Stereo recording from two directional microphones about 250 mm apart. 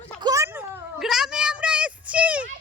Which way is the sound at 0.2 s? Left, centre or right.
Centre.